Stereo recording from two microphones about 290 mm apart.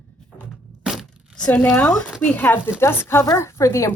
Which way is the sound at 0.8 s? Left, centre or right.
Centre.